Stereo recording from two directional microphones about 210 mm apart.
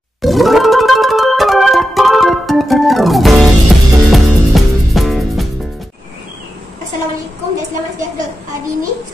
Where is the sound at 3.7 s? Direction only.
Centre (ahead or behind).